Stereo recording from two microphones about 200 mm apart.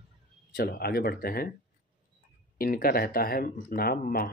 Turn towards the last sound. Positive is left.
turn(degrees=50)  # may be behind; listen again after turning